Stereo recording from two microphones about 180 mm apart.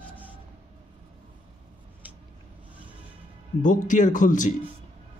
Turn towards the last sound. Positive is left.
turn(degrees=45)  # may be behind; listen again after turning